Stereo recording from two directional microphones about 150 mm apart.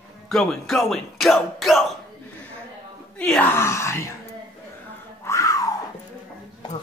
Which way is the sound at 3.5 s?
20° left (ahead or behind).